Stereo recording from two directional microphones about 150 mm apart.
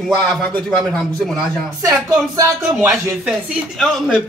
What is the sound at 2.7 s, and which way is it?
Speech, 5° right (ahead or behind).